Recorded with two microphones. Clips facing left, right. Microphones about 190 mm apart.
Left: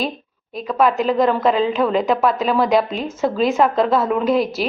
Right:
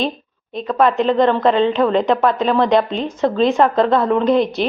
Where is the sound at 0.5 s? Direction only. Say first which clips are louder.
Right 2 dB; 5° left (ahead or behind).